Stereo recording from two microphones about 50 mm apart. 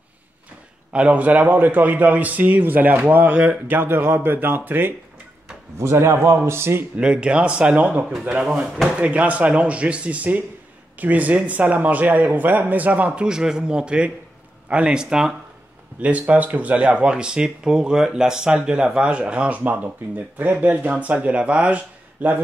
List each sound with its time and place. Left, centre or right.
0.9 s speech: right
3.7 s speech: right
5.8 s speech: right
7.0 s speech: centre
16.0 s speech: right